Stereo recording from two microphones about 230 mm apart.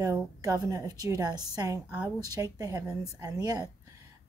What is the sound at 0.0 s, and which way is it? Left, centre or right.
A woman's voice, centre.